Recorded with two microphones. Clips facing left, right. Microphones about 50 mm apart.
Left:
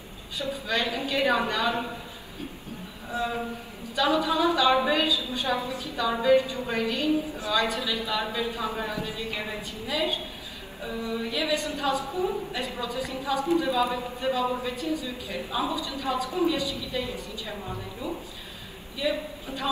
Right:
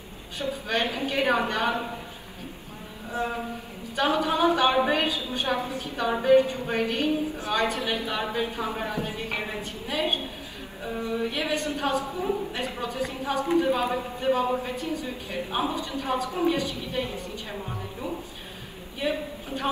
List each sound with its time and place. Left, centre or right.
0.4 s speech: right
3.1 s speech: right
18.9 s speech: right